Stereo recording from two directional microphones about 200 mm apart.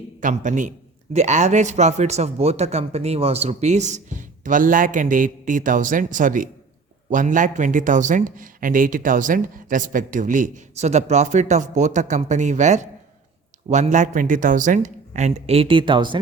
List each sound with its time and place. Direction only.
0.2 s speech: 40° right (ahead or behind); by 16.2 s 25° right (ahead or behind)